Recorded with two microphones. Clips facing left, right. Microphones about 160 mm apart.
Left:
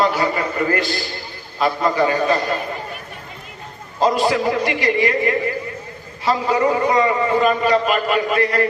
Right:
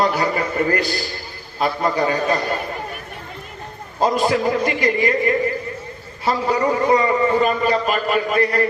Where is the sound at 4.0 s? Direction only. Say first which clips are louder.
Left 1 dB; 45° right (ahead or behind).